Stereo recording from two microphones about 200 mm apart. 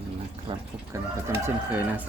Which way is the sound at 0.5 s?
25° right (ahead or behind).